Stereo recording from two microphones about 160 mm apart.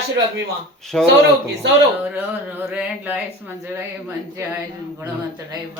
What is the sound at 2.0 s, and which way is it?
Speech, 10° right (ahead or behind).